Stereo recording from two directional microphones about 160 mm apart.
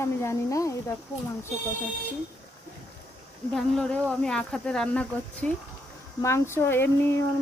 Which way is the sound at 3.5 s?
5° left (ahead or behind).